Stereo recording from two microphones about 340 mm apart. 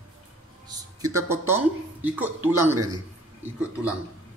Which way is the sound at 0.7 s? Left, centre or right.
Centre.